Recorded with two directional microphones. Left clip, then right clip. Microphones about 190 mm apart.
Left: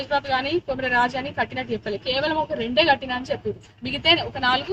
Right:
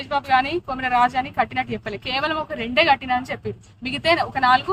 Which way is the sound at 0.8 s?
30° right (ahead or behind).